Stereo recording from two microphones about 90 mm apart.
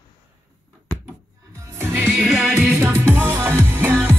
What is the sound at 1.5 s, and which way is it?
Music, 30° right (ahead or behind).